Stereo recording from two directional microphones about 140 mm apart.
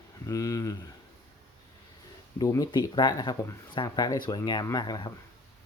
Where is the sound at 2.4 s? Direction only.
25° left (ahead or behind).